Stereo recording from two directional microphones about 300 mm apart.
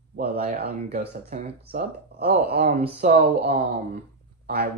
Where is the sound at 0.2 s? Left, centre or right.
Right.